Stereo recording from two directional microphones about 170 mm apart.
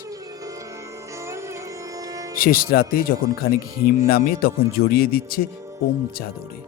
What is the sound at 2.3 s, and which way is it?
Speech, 60° left (ahead or behind).